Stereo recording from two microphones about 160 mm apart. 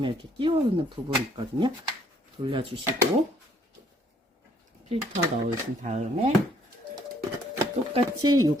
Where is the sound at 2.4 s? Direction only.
30° right (ahead or behind).